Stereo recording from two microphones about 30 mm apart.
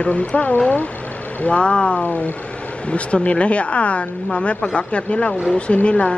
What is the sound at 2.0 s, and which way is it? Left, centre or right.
Speech, left.